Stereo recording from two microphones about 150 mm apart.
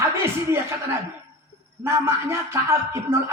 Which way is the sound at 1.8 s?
15° right (ahead or behind).